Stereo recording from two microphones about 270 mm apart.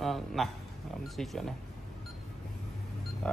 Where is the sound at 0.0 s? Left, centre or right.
Centre.